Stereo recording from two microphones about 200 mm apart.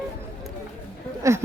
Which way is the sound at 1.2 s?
15° right (ahead or behind).